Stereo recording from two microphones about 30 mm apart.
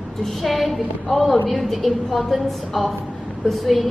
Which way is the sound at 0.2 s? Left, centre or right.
Centre.